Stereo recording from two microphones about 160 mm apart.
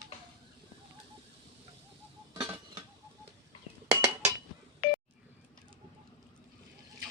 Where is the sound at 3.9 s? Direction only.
15° right (ahead or behind).